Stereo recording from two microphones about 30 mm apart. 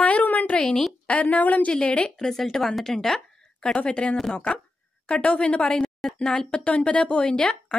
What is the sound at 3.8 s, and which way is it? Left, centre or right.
Speech, left.